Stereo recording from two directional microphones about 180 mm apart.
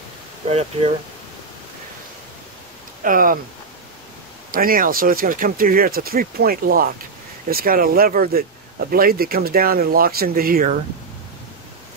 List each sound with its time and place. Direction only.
0.5 s speech: 35° right (ahead or behind)
3.0 s speech: 50° right (ahead or behind)
4.5 s speech: 50° right (ahead or behind)